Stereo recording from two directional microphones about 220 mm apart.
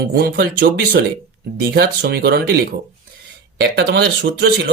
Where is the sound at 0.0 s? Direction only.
45° right (ahead or behind).